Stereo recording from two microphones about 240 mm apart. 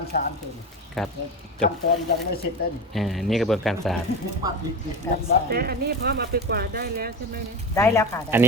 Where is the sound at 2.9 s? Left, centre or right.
Centre.